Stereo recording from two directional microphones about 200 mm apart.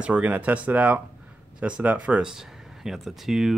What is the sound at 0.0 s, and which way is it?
Speech, 5° right (ahead or behind).